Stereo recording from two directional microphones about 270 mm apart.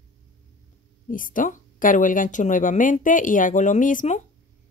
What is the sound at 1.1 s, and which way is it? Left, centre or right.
Speech, left.